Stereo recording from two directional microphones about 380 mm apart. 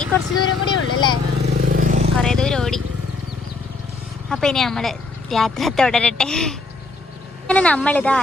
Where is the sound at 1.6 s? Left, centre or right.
Right.